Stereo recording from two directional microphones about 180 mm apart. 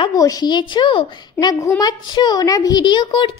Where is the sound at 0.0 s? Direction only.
20° left (ahead or behind).